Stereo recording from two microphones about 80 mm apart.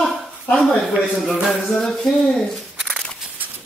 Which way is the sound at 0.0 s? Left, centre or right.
Centre.